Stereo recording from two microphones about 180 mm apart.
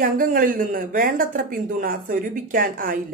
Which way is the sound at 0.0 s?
50° right (ahead or behind).